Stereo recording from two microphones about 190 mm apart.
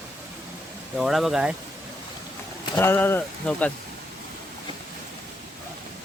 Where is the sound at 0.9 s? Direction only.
Centre (ahead or behind).